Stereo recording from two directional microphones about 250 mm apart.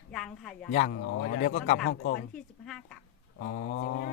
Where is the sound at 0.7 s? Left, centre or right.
Left.